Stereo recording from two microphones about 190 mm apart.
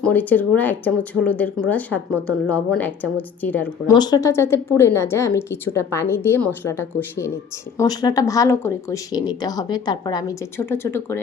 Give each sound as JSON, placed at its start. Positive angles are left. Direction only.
{"t": 0.0, "sound": "speech", "side_deg": 10}
{"t": 3.9, "sound": "speech", "side_deg": 20}